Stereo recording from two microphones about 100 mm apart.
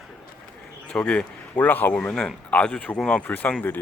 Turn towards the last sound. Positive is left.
turn(degrees=20)  # may be behind; listen again after turning